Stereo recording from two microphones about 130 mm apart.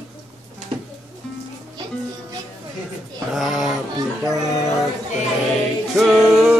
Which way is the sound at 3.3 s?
Centre (ahead or behind).